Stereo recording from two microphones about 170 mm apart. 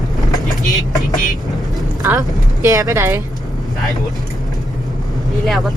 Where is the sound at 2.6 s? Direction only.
15° right (ahead or behind).